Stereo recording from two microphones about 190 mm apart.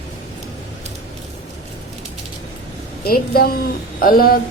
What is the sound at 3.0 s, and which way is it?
A woman's voice, 50° left (ahead or behind).